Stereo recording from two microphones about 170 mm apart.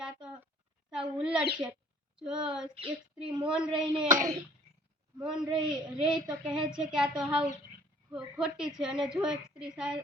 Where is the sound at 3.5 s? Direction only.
5° right (ahead or behind).